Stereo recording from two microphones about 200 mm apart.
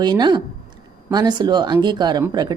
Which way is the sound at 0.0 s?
20° right (ahead or behind).